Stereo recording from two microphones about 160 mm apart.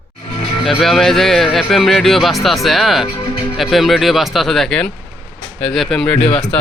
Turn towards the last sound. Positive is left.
turn(degrees=5)  # may be behind; listen again after turning